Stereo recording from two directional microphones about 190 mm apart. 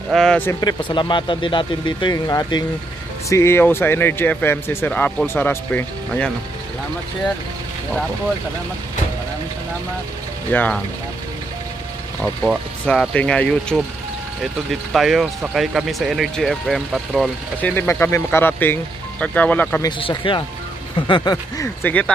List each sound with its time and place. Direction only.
0.1 s a man's voice: 5° left (ahead or behind)
10.5 s speech: 10° left (ahead or behind)
12.8 s speech: 5° left (ahead or behind)
20.0 s a man's voice: 25° left (ahead or behind)
21.8 s speech: 5° left (ahead or behind)